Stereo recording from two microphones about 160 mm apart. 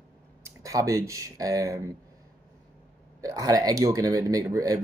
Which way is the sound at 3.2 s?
20° right (ahead or behind).